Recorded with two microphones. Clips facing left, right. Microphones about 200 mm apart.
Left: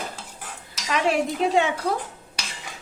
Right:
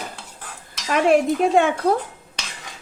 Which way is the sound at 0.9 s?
50° right (ahead or behind).